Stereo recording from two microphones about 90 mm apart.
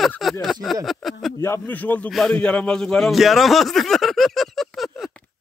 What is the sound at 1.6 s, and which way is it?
A man's voice, 20° left (ahead or behind).